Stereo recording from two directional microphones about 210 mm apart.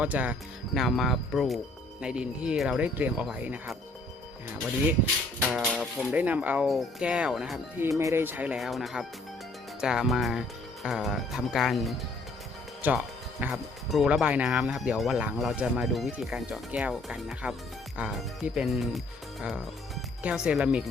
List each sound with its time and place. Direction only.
0.0 s speech: 5° right (ahead or behind)
5.4 s speech: centre (ahead or behind)
7.9 s speech: 15° right (ahead or behind)